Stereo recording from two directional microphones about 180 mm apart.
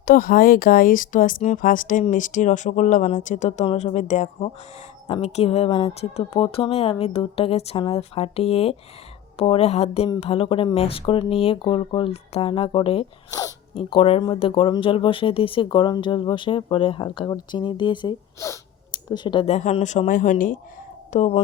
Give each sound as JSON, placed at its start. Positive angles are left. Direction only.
{"t": 0.0, "sound": "speech", "side_deg": 55}
{"t": 18.3, "sound": "speech", "side_deg": 15}
{"t": 21.1, "sound": "speech", "side_deg": 35}